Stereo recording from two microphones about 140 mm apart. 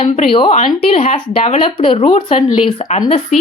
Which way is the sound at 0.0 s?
40° left (ahead or behind).